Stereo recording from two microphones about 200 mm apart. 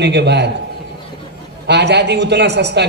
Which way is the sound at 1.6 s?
55° right (ahead or behind).